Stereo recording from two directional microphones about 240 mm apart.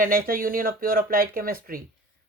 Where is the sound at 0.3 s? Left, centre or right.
Right.